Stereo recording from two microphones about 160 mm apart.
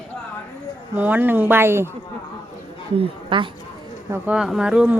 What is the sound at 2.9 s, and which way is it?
Speech, 30° right (ahead or behind).